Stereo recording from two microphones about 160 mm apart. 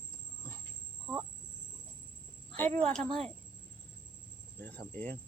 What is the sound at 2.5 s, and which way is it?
Speech, 10° left (ahead or behind).